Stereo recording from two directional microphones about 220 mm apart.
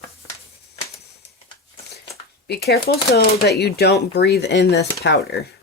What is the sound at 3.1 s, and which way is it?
Speech, 45° left (ahead or behind).